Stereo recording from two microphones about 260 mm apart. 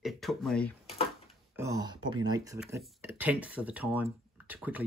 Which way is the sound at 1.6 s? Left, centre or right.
Centre.